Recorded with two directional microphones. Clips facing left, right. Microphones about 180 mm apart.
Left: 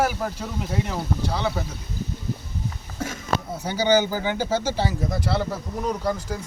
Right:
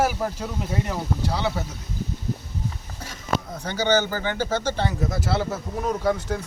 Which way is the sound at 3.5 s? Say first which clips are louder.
Left 2 dB; 10° left (ahead or behind).